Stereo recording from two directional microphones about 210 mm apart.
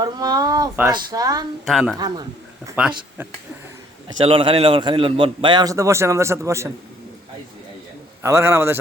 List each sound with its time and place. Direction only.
0.0 s speech: 20° right (ahead or behind)
1.6 s a woman's voice: centre (ahead or behind)
2.0 s a man's voice: 20° right (ahead or behind)
4.2 s a man's voice: 25° right (ahead or behind)
8.2 s speech: 10° right (ahead or behind)